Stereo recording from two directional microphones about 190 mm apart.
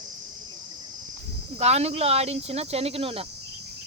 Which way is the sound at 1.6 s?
35° right (ahead or behind).